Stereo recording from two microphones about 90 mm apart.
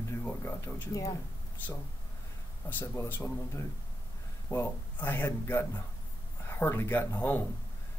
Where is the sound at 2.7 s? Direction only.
25° left (ahead or behind).